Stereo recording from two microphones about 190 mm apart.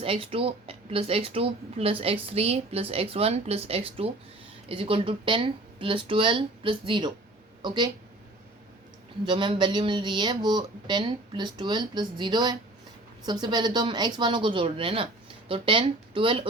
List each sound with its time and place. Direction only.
0.0 s a woman's voice: 30° right (ahead or behind)
9.2 s speech: 25° right (ahead or behind)